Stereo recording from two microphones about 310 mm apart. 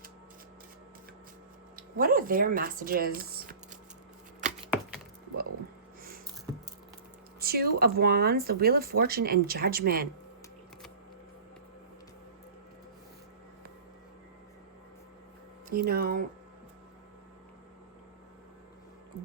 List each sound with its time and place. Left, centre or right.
1.7 s speech: right
4.7 s chopping: centre
7.3 s speech: right
15.7 s speech: right